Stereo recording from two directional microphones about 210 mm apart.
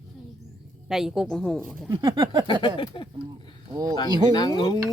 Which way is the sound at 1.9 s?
25° right (ahead or behind).